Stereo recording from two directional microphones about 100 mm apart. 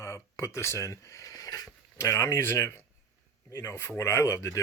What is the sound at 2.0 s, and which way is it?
Speech, 25° left (ahead or behind).